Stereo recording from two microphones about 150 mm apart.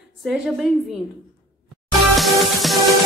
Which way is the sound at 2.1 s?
Centre (ahead or behind).